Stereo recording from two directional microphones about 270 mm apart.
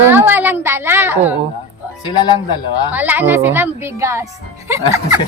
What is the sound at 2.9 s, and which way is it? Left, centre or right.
A woman's voice, centre.